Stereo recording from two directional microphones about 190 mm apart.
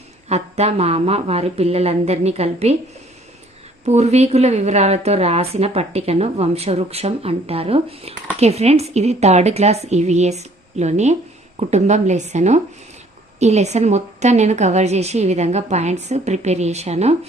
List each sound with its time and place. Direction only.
0.3 s a woman's voice: 35° right (ahead or behind)
3.8 s a woman's voice: 35° right (ahead or behind)